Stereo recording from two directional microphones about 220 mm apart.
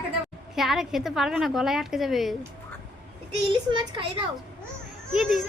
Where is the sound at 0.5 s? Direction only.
Centre (ahead or behind).